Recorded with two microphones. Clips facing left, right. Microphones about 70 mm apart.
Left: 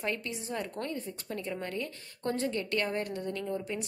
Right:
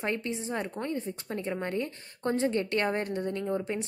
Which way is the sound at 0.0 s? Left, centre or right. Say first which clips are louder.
Right 3 dB; right.